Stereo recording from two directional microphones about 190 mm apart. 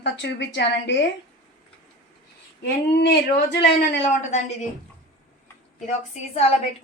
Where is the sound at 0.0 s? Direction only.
65° left (ahead or behind).